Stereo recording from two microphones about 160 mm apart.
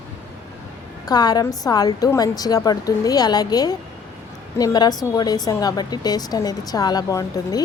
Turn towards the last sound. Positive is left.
turn(degrees=25)  # may be behind; listen again after turning